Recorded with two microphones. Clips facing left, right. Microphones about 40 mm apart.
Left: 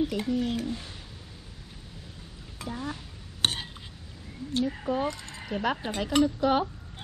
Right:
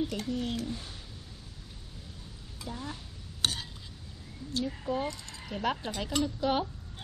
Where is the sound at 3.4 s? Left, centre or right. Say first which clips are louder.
Left 4 dB; left.